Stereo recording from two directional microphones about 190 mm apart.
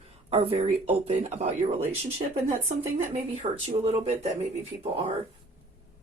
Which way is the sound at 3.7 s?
30° right (ahead or behind).